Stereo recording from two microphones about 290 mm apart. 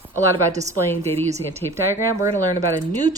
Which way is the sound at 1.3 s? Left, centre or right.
Right.